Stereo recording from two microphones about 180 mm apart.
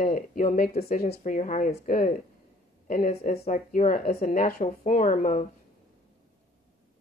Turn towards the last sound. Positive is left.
turn(degrees=45)  # may be behind; listen again after turning